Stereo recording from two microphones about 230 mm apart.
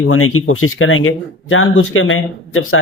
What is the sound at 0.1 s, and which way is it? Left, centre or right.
Speech, left.